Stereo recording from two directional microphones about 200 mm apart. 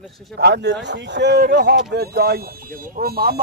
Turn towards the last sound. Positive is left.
turn(degrees=-50)  # may be behind; listen again after turning